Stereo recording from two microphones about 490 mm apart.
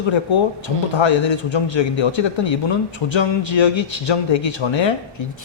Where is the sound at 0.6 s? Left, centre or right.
Left.